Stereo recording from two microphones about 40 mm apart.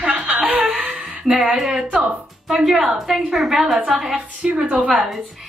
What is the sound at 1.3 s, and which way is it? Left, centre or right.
A woman's voice, centre.